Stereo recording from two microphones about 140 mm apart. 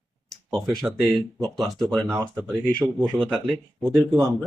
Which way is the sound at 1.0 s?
Centre (ahead or behind).